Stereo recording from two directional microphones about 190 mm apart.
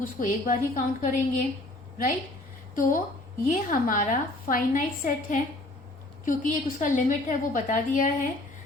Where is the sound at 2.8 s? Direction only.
45° left (ahead or behind).